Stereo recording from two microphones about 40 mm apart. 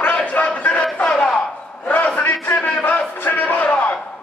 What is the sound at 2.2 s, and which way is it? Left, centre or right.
Music, left.